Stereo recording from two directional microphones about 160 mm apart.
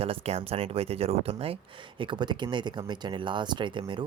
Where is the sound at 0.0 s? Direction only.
40° right (ahead or behind).